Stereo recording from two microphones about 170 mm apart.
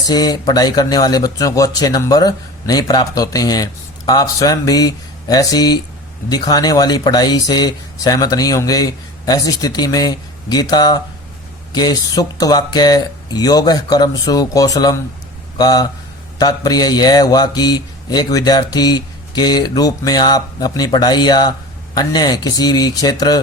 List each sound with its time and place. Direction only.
0.1 s a man's voice: 25° left (ahead or behind)